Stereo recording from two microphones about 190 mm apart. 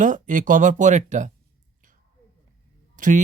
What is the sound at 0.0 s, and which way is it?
Speech, 45° right (ahead or behind).